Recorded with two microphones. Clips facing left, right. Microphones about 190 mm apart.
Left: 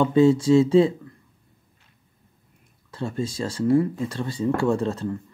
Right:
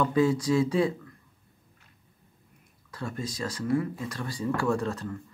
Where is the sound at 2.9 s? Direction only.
25° left (ahead or behind).